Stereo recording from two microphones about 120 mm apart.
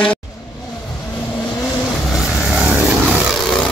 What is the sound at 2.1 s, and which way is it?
Vehicle, 5° right (ahead or behind).